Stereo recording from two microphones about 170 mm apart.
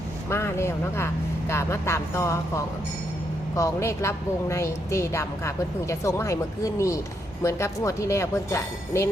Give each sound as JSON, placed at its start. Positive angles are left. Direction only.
{"t": 0.3, "sound": "a woman's voice", "side_deg": 15}